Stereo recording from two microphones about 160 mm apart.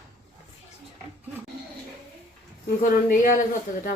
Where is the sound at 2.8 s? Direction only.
60° left (ahead or behind).